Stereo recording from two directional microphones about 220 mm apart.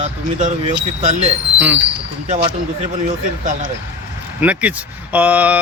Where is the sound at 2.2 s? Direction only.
25° right (ahead or behind).